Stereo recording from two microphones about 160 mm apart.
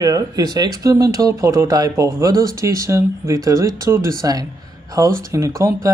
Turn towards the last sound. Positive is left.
turn(degrees=-20)  # may be behind; listen again after turning